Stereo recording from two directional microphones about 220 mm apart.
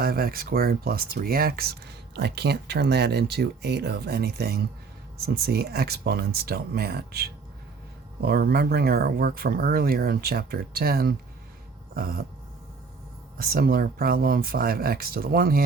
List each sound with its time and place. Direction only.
0.0 s speech: 45° right (ahead or behind)
13.4 s speech: 40° right (ahead or behind)